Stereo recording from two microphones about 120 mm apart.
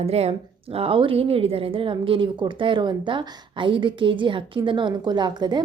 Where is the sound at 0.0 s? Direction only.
60° right (ahead or behind).